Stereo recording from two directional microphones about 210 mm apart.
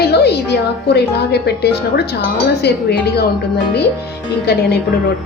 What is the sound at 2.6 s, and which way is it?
Speech, 50° left (ahead or behind).